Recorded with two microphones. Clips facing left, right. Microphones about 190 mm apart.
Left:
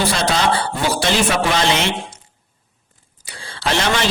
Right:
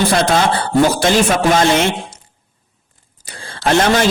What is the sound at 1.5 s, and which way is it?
Speech, 50° right (ahead or behind).